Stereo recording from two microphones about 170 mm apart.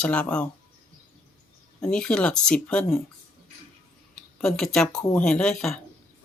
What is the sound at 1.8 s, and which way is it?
Speech, 5° left (ahead or behind).